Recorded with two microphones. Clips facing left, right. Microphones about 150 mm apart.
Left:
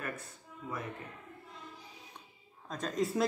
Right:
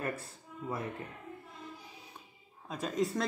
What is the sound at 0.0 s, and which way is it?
Speech, 30° right (ahead or behind).